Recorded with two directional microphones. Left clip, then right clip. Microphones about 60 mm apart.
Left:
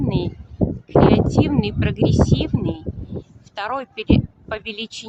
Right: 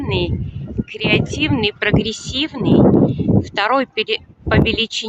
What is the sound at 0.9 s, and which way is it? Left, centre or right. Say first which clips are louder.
A woman's voice: left 2 dB; right.